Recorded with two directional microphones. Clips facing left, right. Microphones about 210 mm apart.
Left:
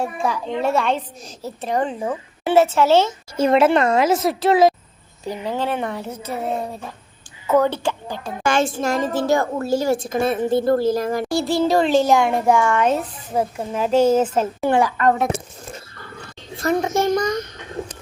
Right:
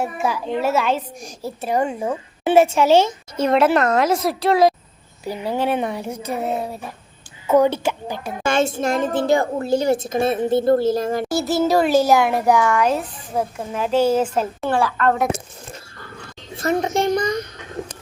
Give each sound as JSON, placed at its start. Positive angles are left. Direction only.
{"t": 0.0, "sound": "a woman's voice", "side_deg": -5}
{"t": 3.4, "sound": "a child's voice", "side_deg": 0}
{"t": 5.2, "sound": "a woman's voice", "side_deg": -10}
{"t": 8.4, "sound": "a woman's voice", "side_deg": -25}
{"t": 9.0, "sound": "a child's voice", "side_deg": -55}
{"t": 9.6, "sound": "a woman's voice", "side_deg": -20}
{"t": 11.5, "sound": "a woman's voice", "side_deg": -5}
{"t": 14.2, "sound": "a woman's voice", "side_deg": 5}
{"t": 16.8, "sound": "a woman's voice", "side_deg": -20}